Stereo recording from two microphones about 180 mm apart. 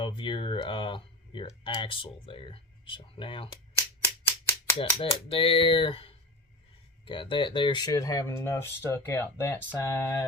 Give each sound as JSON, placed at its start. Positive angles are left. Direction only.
{"t": 0.0, "sound": "speech", "side_deg": 25}
{"t": 3.8, "sound": "a sound", "side_deg": 15}
{"t": 4.8, "sound": "speech", "side_deg": 30}